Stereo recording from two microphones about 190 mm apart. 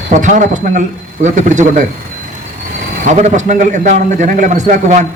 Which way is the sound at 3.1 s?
40° right (ahead or behind).